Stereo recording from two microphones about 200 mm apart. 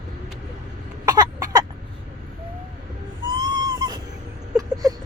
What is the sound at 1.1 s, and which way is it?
Cough, 15° right (ahead or behind).